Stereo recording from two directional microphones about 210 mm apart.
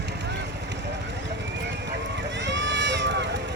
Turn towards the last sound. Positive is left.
turn(degrees=-55)  # may be behind; listen again after turning